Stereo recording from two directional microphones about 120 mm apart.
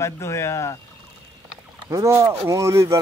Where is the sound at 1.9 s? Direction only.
25° right (ahead or behind).